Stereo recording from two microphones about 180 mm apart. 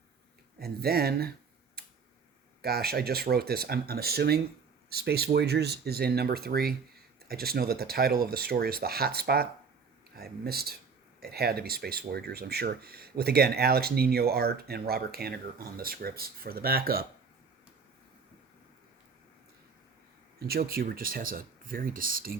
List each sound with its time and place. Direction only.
0.6 s speech: 60° right (ahead or behind)
2.6 s speech: 60° right (ahead or behind)
20.5 s speech: 55° right (ahead or behind)